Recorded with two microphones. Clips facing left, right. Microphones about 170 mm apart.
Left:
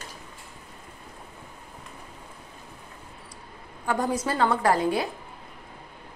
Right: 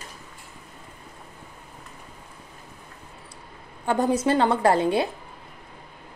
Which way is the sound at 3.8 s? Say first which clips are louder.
Right 4 dB; 25° right (ahead or behind).